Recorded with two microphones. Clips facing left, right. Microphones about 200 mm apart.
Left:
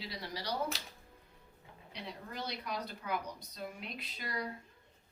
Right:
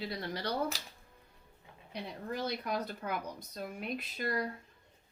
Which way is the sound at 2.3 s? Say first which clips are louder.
Right 6 dB; 50° right (ahead or behind).